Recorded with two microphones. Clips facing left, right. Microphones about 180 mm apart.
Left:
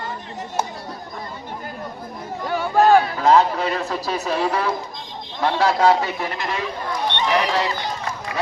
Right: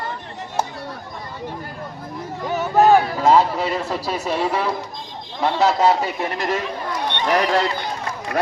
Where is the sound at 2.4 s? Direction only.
20° right (ahead or behind).